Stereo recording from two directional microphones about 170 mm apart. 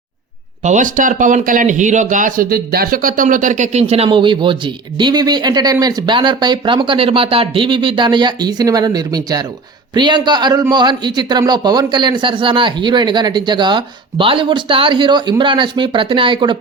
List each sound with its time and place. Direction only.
0.6 s a man's voice: 50° right (ahead or behind); by 16.6 s 30° right (ahead or behind)